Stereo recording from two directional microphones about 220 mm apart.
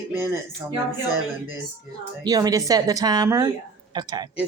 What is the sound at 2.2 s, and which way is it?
A woman's voice, 15° right (ahead or behind).